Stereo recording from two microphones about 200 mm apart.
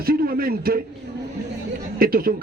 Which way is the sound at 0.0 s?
45° right (ahead or behind).